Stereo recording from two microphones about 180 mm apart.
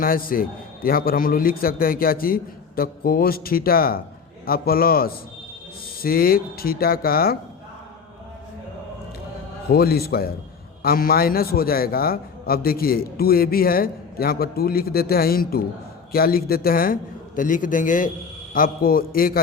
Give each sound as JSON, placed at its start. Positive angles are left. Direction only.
{"t": 0.0, "sound": "a man's voice", "side_deg": 55}
{"t": 9.6, "sound": "a man's voice", "side_deg": 60}